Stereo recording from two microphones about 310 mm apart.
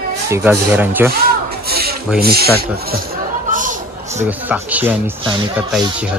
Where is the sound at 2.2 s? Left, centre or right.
Right.